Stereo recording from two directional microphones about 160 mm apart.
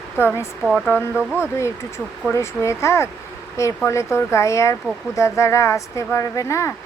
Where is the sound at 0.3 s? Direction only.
5° right (ahead or behind).